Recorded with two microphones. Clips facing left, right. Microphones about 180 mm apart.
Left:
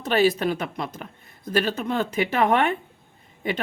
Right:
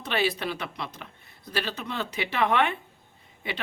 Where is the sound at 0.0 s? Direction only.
45° left (ahead or behind).